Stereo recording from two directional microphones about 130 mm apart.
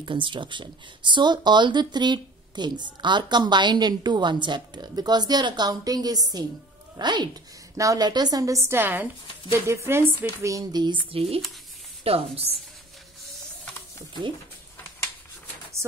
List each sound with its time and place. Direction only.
0.0 s speech: 40° right (ahead or behind)
11.1 s a woman's voice: 50° right (ahead or behind)